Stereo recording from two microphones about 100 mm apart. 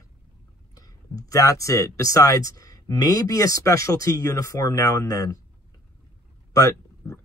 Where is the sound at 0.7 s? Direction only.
35° left (ahead or behind).